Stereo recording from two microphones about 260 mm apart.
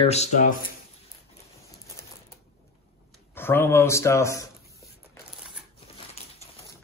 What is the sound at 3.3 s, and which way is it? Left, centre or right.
Speech, centre.